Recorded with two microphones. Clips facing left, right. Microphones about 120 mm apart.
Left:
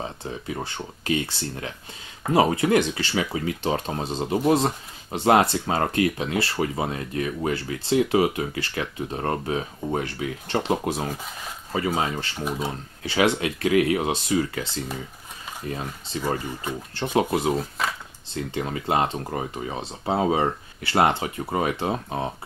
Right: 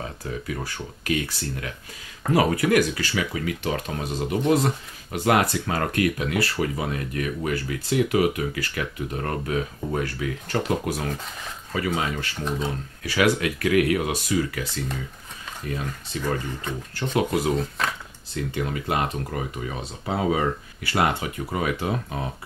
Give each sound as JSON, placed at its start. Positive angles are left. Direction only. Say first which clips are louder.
{"t": 0.0, "sound": "speech", "louder": "even", "side_deg": 25}
{"t": 12.4, "sound": "speech", "louder": "even", "side_deg": 10}
{"t": 12.6, "sound": "speech", "louder": "right 1 dB", "side_deg": 25}
{"t": 17.6, "sound": "speech", "louder": "right 1 dB", "side_deg": 5}
{"t": 18.3, "sound": "speech", "louder": "even", "side_deg": 25}